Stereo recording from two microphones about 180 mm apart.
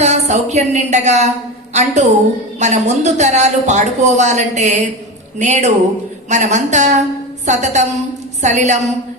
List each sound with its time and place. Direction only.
0.0 s a woman's voice: 40° right (ahead or behind)